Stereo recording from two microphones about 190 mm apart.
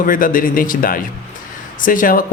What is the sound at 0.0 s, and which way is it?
Speech, 45° left (ahead or behind).